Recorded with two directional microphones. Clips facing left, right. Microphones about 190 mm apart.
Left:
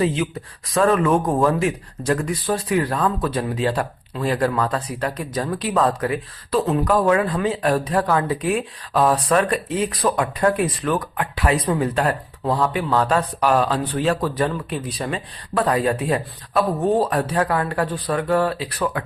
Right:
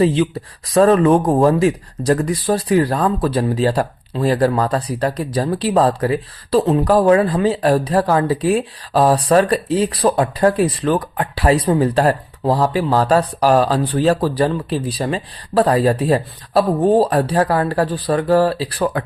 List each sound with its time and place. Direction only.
0.0 s speech: 35° right (ahead or behind)